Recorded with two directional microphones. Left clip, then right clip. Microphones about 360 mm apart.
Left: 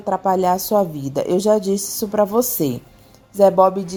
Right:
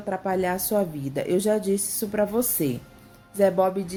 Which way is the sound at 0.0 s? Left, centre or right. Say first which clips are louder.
Left 8 dB; centre.